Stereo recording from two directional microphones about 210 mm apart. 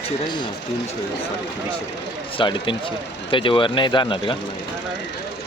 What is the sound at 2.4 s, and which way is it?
Speech, 25° left (ahead or behind).